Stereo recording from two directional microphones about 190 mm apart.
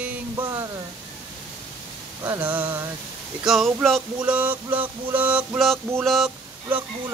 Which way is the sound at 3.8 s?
5° right (ahead or behind).